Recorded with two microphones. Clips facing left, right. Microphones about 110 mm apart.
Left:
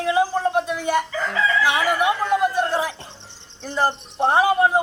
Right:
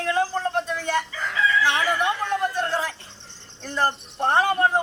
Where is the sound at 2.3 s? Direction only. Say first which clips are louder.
Left 5 dB; 10° left (ahead or behind).